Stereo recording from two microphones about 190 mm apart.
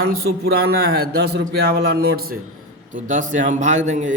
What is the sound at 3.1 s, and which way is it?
Speech, 40° right (ahead or behind).